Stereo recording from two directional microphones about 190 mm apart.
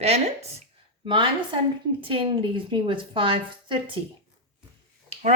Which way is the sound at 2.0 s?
25° right (ahead or behind).